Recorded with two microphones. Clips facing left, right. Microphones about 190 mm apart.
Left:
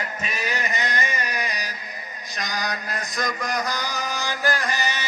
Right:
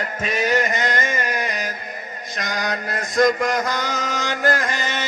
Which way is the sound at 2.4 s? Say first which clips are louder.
Right 4 dB; 50° right (ahead or behind).